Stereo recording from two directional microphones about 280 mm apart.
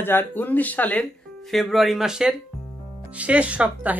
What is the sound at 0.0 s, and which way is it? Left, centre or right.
Speech, centre.